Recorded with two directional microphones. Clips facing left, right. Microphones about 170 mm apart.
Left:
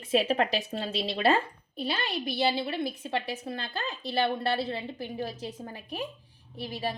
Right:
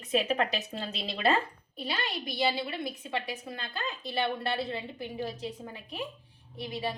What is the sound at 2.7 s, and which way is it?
A woman's voice, 30° left (ahead or behind).